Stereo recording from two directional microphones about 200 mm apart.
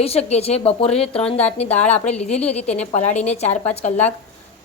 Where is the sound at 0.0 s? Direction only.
30° left (ahead or behind).